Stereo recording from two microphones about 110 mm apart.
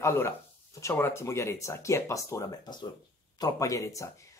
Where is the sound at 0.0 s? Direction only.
25° left (ahead or behind).